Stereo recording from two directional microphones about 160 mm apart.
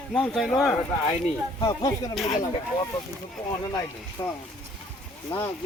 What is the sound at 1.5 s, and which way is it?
Speech, 25° left (ahead or behind).